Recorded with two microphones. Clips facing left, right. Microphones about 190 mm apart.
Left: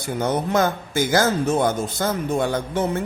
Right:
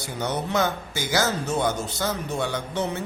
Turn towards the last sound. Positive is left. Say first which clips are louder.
# left 5 dB
turn(degrees=50)  # may be behind; listen again after turning